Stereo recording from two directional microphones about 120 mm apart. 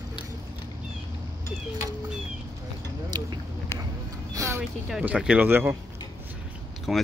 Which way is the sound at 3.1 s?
35° right (ahead or behind).